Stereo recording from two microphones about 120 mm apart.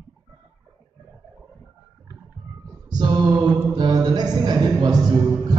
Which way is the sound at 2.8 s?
35° right (ahead or behind).